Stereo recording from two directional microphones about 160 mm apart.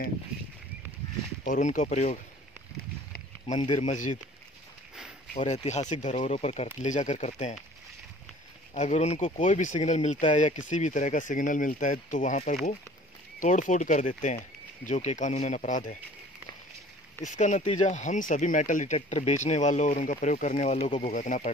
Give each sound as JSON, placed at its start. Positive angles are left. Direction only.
{"t": 1.4, "sound": "speech", "side_deg": 55}
{"t": 3.8, "sound": "speech", "side_deg": 50}
{"t": 5.5, "sound": "speech", "side_deg": 45}
{"t": 8.7, "sound": "speech", "side_deg": 45}
{"t": 17.2, "sound": "speech", "side_deg": 50}